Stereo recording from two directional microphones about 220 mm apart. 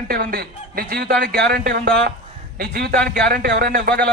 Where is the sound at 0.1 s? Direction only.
45° right (ahead or behind).